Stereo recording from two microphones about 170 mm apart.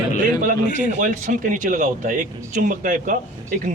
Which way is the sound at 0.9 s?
50° right (ahead or behind).